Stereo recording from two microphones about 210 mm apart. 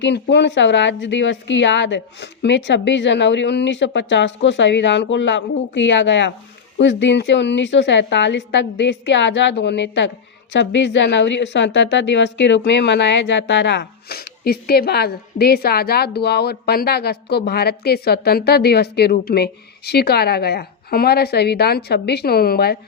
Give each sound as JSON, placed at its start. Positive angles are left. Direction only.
{"t": 0.0, "sound": "a woman's voice", "side_deg": 55}